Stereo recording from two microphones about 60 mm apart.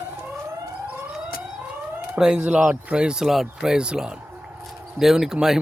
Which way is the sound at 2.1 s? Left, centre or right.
Centre.